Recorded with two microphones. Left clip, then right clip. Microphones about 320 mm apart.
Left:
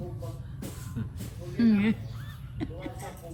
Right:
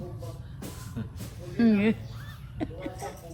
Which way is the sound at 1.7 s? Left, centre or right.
Left.